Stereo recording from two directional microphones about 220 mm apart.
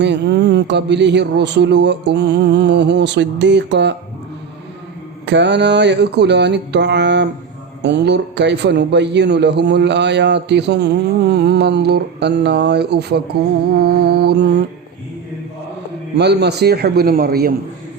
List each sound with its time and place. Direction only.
0.0 s a man's voice: 50° right (ahead or behind)
5.2 s a man's voice: 50° right (ahead or behind)
16.1 s a man's voice: 50° right (ahead or behind)